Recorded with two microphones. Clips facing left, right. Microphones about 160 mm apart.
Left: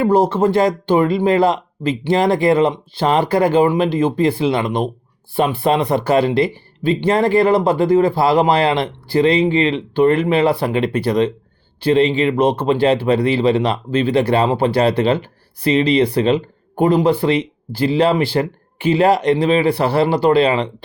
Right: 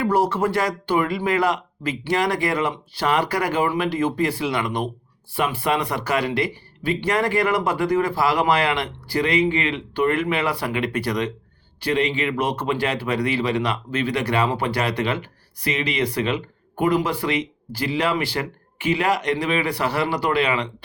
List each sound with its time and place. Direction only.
0.0 s speech: 25° left (ahead or behind)